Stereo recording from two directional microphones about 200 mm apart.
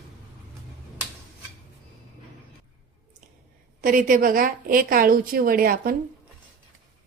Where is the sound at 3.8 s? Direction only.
45° right (ahead or behind).